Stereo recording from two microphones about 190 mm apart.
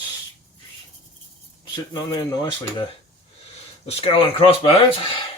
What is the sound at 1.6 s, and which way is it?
Speech, 25° left (ahead or behind).